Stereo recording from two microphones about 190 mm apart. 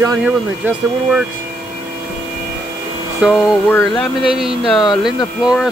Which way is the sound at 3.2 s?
Centre (ahead or behind).